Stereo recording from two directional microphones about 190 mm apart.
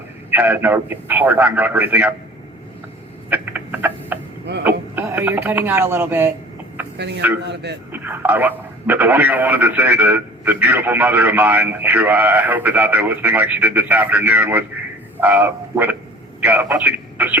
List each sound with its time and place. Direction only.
0.3 s speech: 10° right (ahead or behind)
3.2 s rodents: 10° right (ahead or behind)
4.6 s speech: 10° right (ahead or behind)
7.4 s a man's voice: 65° right (ahead or behind)
7.9 s a man's voice: 10° right (ahead or behind)